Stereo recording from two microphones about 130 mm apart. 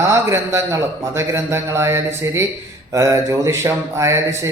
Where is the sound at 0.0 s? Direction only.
20° right (ahead or behind).